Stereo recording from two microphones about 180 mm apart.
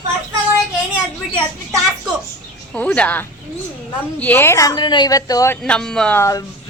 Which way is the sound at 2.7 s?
5° left (ahead or behind).